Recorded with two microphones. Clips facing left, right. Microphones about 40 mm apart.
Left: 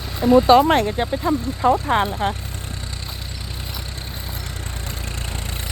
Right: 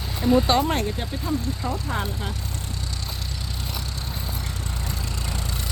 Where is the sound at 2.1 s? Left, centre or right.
Left.